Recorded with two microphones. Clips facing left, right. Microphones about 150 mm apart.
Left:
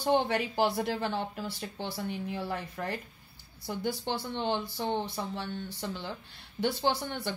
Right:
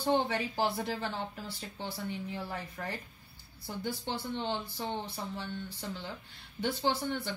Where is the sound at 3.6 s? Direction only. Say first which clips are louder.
Left 4 dB; 75° left (ahead or behind).